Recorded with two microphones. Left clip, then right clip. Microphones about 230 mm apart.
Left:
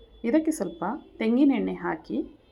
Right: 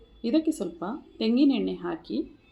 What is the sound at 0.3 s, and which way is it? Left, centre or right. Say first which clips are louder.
Speech: left 1 dB; centre.